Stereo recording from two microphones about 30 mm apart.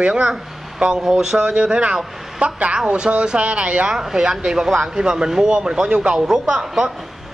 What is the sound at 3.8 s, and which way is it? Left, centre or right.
Speech, centre.